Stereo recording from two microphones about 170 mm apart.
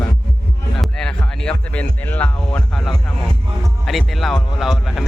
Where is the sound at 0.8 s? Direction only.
5° left (ahead or behind).